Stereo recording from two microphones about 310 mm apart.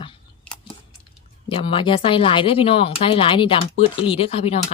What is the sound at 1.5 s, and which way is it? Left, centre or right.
Speech, centre.